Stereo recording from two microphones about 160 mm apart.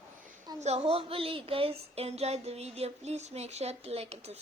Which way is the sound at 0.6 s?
40° right (ahead or behind).